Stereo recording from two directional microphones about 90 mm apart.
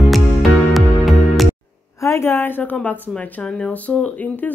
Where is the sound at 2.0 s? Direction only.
35° left (ahead or behind).